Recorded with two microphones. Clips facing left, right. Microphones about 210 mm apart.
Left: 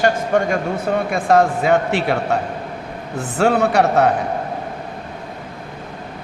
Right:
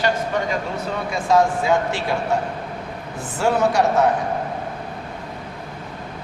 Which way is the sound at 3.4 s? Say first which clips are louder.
Left 3 dB; 65° left (ahead or behind).